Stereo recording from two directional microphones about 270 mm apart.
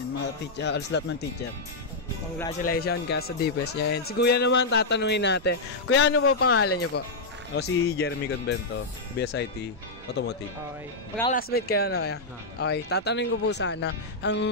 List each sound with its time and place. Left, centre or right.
0.2 s speech: left
2.6 s speech: left
6.6 s speech: left
7.5 s speech: left
11.3 s speech: left